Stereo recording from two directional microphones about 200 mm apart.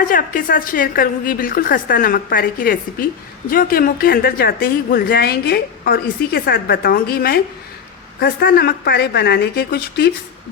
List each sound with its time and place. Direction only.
0.0 s a woman's voice: 45° left (ahead or behind)